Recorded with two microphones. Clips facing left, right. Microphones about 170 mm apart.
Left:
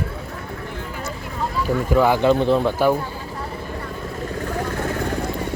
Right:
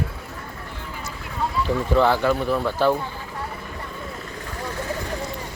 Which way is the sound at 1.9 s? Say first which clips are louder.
Left 3 dB; 10° left (ahead or behind).